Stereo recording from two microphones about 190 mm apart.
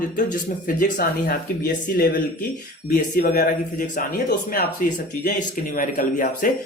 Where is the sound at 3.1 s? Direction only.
50° left (ahead or behind).